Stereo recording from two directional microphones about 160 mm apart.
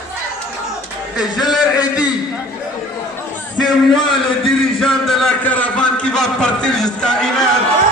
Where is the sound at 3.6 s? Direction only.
30° left (ahead or behind).